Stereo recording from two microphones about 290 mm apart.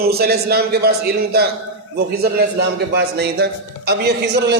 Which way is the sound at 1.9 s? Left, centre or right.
Right.